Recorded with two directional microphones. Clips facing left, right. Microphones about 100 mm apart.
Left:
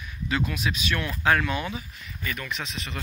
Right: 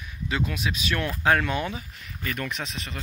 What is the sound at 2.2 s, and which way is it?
Speech, 50° right (ahead or behind).